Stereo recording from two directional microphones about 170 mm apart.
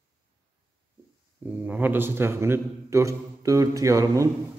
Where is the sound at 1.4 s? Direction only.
10° right (ahead or behind).